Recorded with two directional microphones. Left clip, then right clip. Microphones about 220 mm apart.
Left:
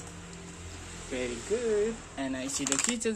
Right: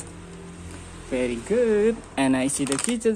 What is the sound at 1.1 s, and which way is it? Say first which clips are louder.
Speech: right 9 dB; 25° right (ahead or behind).